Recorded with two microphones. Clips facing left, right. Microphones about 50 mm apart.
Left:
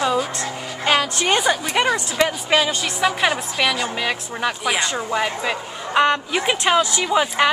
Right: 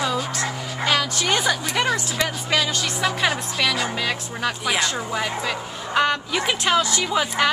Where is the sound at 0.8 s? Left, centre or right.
Left; by 3.9 s centre.